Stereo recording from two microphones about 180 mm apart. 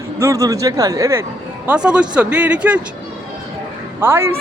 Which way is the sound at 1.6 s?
5° right (ahead or behind).